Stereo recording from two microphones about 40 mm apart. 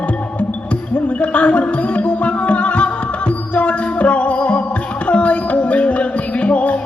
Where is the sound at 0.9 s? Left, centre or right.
Left.